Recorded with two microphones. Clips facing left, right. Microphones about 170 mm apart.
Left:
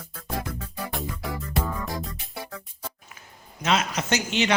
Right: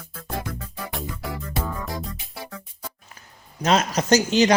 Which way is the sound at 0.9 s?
Centre (ahead or behind).